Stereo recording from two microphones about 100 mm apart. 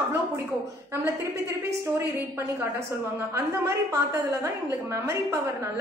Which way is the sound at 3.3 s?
30° right (ahead or behind).